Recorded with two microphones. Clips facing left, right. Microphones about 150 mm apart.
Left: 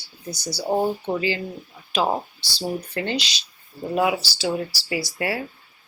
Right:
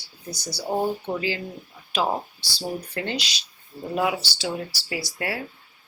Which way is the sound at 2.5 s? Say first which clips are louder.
Left 3 dB; centre (ahead or behind).